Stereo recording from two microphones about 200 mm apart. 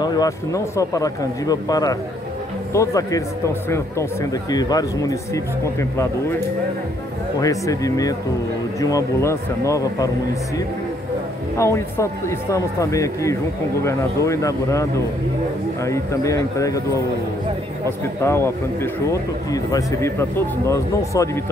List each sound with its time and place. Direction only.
0.0 s speech: 20° left (ahead or behind)
7.3 s speech: 15° left (ahead or behind)
11.5 s speech: 15° left (ahead or behind)